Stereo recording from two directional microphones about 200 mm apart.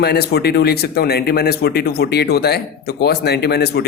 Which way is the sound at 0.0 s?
55° left (ahead or behind).